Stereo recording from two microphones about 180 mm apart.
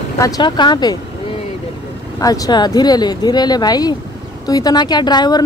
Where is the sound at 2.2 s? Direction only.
20° left (ahead or behind).